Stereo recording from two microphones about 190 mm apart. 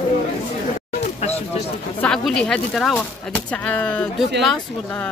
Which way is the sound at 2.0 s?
5° left (ahead or behind).